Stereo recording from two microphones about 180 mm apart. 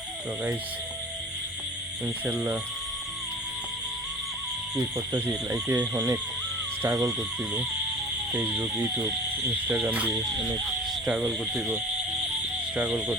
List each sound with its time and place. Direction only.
4.9 s speech: 15° right (ahead or behind)
8.3 s speech: 5° right (ahead or behind)